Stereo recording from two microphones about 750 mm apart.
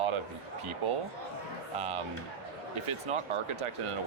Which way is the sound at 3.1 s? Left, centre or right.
Right.